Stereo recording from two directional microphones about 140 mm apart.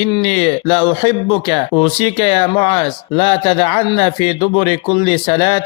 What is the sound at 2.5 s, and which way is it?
Mantra, 35° left (ahead or behind).